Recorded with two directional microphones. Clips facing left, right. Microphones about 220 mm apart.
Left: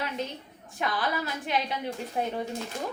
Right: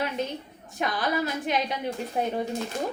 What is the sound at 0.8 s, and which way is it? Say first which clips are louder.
A woman's voice: right 3 dB; 20° right (ahead or behind).